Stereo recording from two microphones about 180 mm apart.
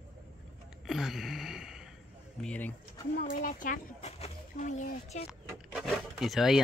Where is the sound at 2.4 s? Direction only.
5° left (ahead or behind).